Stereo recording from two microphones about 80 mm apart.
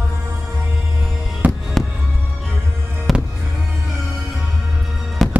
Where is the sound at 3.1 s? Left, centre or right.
Centre.